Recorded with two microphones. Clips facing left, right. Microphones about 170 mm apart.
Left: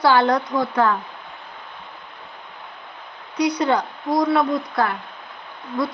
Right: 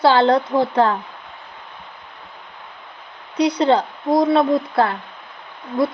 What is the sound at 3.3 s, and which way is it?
Speech, 30° right (ahead or behind).